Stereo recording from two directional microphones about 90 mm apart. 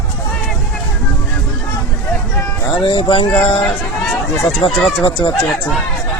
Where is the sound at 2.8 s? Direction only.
75° left (ahead or behind).